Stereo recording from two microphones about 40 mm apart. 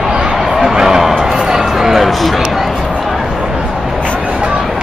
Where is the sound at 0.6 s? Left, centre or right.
Centre.